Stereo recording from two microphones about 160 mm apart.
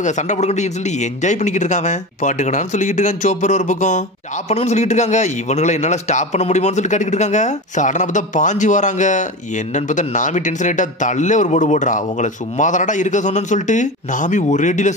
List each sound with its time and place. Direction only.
0.0 s speech: 45° left (ahead or behind)